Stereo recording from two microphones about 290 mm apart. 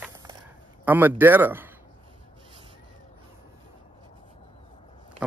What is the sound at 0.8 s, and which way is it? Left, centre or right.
Speech, centre.